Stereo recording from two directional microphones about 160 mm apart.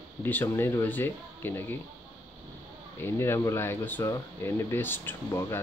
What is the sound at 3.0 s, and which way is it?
A man's voice, 15° left (ahead or behind).